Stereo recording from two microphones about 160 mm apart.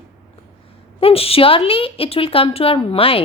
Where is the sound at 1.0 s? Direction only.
35° left (ahead or behind).